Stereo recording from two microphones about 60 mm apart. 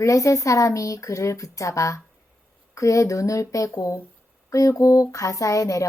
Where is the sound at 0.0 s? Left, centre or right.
Left.